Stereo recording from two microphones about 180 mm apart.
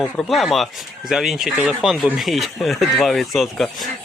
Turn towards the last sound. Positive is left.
turn(degrees=0)  # may be behind; listen again after turning